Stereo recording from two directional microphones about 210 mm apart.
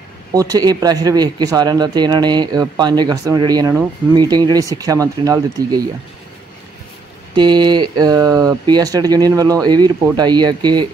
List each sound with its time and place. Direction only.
0.3 s a man's voice: 15° right (ahead or behind)
7.3 s a man's voice: 20° right (ahead or behind)